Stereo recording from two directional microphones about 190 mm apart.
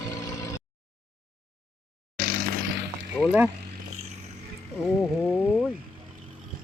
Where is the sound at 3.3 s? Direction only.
10° right (ahead or behind).